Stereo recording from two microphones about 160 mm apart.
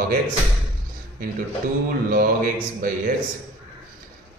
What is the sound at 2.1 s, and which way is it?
A man's voice, 60° right (ahead or behind).